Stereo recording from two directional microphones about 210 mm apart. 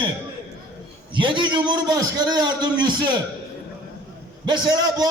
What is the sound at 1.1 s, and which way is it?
A man's voice, 20° right (ahead or behind).